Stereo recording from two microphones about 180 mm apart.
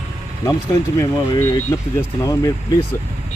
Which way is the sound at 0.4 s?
15° left (ahead or behind).